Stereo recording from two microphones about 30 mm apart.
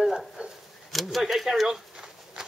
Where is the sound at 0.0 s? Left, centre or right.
Centre.